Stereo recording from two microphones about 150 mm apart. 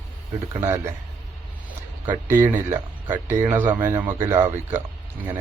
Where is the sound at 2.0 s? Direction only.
15° right (ahead or behind).